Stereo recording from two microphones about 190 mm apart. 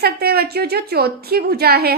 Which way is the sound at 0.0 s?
55° right (ahead or behind).